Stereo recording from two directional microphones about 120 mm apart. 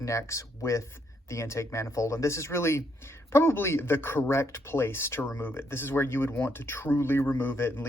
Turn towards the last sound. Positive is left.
turn(degrees=20)  # may be behind; listen again after turning